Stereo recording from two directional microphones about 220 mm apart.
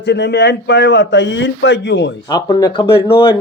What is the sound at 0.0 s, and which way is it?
Speech, 50° left (ahead or behind).